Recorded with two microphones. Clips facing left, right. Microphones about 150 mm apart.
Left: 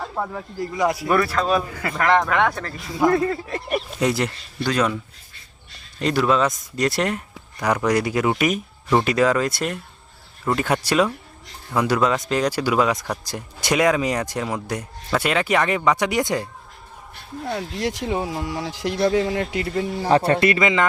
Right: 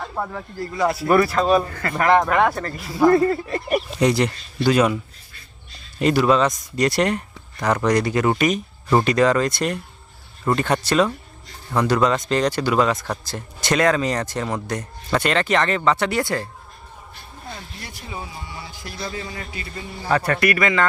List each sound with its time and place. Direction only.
0.0 s speech: 5° left (ahead or behind)
0.6 s speech: 15° left (ahead or behind)
1.0 s speech: 5° right (ahead or behind)
1.7 s speech: 10° left (ahead or behind)
2.0 s speech: 5° right (ahead or behind)
4.6 s speech: 10° right (ahead or behind)
6.0 s speech: 5° right (ahead or behind)
8.9 s speech: 5° right (ahead or behind)
9.1 s speech: 5° left (ahead or behind)
17.4 s speech: 80° left
20.1 s speech: 30° left (ahead or behind)